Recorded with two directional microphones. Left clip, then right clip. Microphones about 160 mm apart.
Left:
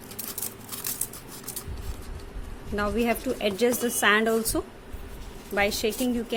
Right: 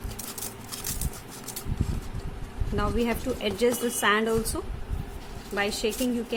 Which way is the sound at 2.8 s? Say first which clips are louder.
Left 2 dB; 25° left (ahead or behind).